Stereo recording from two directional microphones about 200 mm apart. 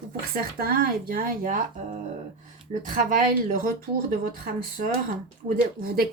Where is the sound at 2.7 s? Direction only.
40° right (ahead or behind).